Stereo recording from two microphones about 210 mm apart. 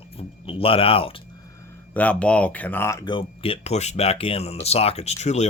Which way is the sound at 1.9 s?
5° left (ahead or behind).